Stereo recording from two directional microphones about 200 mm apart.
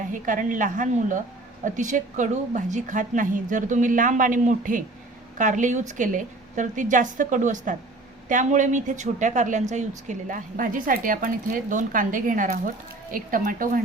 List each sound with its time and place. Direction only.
0.1 s a woman's voice: 40° right (ahead or behind)